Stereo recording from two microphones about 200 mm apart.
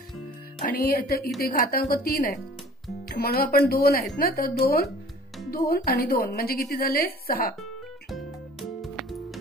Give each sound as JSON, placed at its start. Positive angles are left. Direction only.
{"t": 0.7, "sound": "a woman's voice", "side_deg": 50}
{"t": 8.1, "sound": "music", "side_deg": 0}